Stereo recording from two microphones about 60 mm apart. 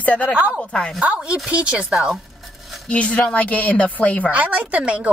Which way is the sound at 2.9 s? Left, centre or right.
Centre.